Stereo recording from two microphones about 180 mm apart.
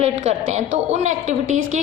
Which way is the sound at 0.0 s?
35° right (ahead or behind).